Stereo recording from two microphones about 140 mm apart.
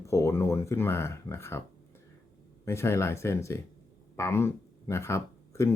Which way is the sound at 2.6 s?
20° left (ahead or behind).